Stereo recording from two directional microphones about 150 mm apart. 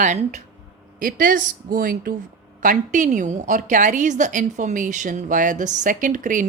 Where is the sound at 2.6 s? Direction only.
60° right (ahead or behind).